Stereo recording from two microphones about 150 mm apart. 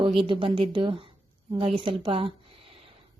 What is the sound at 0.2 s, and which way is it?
Speech, 35° right (ahead or behind).